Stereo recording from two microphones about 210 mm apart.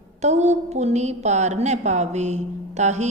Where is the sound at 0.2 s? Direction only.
30° right (ahead or behind).